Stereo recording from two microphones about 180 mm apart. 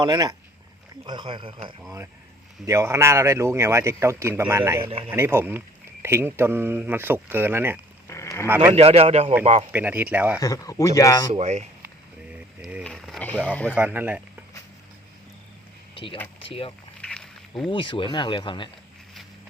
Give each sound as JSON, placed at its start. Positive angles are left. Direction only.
{"t": 0.0, "sound": "speech", "side_deg": -20}
{"t": 2.6, "sound": "speech", "side_deg": -15}
{"t": 4.8, "sound": "a man's voice", "side_deg": -30}
{"t": 5.1, "sound": "speech", "side_deg": -15}
{"t": 8.0, "sound": "a sound", "side_deg": 15}
{"t": 8.7, "sound": "a man's voice", "side_deg": -35}
{"t": 9.7, "sound": "speech", "side_deg": -10}
{"t": 10.4, "sound": "speech", "side_deg": 20}
{"t": 11.3, "sound": "a man's voice", "side_deg": -40}
{"t": 12.8, "sound": "speech", "side_deg": 5}
{"t": 13.7, "sound": "speech", "side_deg": -10}
{"t": 16.4, "sound": "speech", "side_deg": 30}
{"t": 17.0, "sound": "a sound", "side_deg": 5}
{"t": 17.7, "sound": "speech", "side_deg": 30}